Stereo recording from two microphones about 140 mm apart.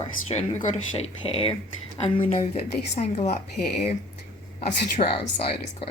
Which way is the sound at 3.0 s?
50° left (ahead or behind).